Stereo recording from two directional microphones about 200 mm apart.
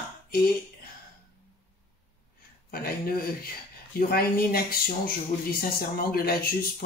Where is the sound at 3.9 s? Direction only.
50° left (ahead or behind).